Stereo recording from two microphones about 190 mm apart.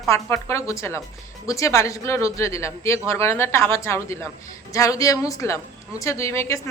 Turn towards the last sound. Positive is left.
turn(degrees=15)  # may be behind; listen again after turning